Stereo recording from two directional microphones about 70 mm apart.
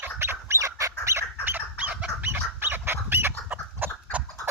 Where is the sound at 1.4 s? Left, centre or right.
Right.